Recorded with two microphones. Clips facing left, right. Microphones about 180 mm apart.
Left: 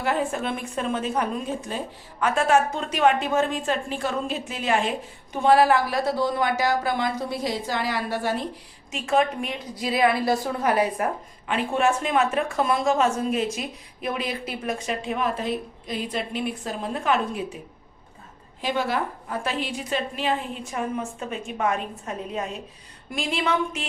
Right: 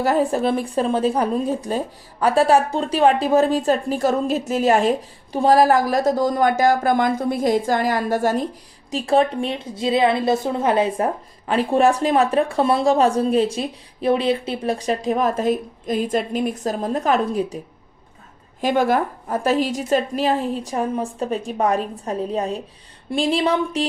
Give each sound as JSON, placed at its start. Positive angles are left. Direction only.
{"t": 0.0, "sound": "a woman's voice", "side_deg": -40}
{"t": 8.9, "sound": "a woman's voice", "side_deg": -35}
{"t": 18.6, "sound": "a woman's voice", "side_deg": -45}